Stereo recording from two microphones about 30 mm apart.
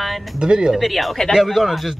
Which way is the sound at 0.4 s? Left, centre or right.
Right.